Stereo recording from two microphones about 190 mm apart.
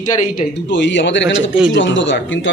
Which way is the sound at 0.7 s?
70° left (ahead or behind).